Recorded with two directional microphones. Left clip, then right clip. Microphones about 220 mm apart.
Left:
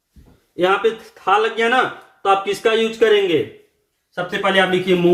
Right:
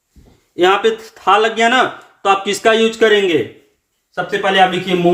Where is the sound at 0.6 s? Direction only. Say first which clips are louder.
Right 4 dB; 45° right (ahead or behind).